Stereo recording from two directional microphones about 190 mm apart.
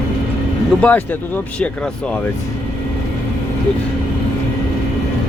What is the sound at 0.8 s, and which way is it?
Speech, 10° left (ahead or behind).